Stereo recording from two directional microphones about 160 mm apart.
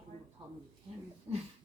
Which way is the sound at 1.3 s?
35° right (ahead or behind).